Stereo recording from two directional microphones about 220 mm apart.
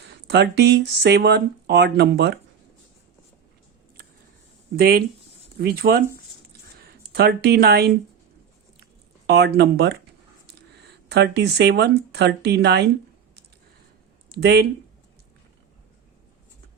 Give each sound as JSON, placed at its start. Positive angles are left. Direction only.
{"t": 0.1, "sound": "speech", "side_deg": -50}
{"t": 4.8, "sound": "speech", "side_deg": -45}
{"t": 9.2, "sound": "speech", "side_deg": -50}
{"t": 14.3, "sound": "speech", "side_deg": -50}